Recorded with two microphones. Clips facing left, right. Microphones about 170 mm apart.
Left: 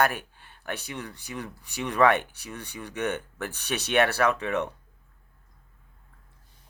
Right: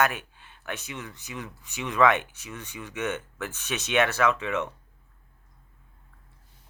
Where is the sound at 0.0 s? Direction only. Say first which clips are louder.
Left 1 dB; 40° left (ahead or behind).